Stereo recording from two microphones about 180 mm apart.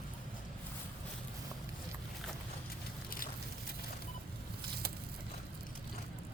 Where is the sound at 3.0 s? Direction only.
55° left (ahead or behind).